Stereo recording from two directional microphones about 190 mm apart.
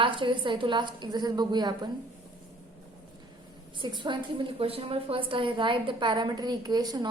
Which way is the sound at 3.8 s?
25° right (ahead or behind).